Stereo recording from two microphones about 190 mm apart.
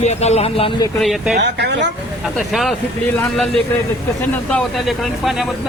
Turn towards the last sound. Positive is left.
turn(degrees=0)  # may be behind; listen again after turning